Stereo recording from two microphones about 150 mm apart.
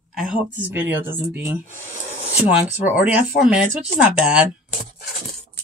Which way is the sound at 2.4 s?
10° right (ahead or behind).